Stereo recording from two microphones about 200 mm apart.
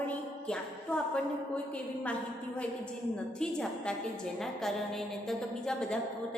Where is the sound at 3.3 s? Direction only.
5° left (ahead or behind).